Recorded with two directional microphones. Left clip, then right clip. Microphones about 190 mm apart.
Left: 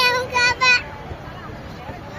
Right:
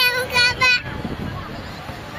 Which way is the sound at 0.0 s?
15° left (ahead or behind).